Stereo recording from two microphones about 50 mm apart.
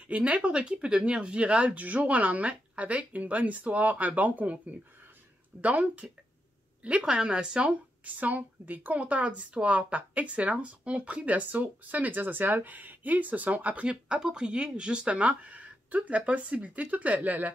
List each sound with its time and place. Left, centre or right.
0.1 s speech: right
8.0 s speech: right
13.8 s speech: centre; by 17.5 s right